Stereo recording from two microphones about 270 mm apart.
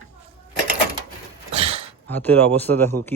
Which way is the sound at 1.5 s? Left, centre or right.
Right.